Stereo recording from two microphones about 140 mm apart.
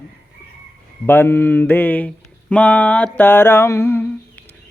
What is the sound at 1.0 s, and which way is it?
Speech, 15° left (ahead or behind).